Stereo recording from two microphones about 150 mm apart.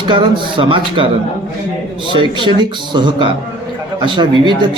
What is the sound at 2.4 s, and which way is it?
A man's voice, 30° right (ahead or behind).